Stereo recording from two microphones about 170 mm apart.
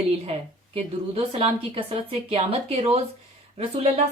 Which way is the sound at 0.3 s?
35° right (ahead or behind).